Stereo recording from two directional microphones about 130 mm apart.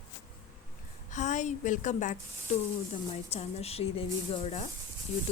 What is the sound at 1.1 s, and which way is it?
A woman's voice, 70° left (ahead or behind).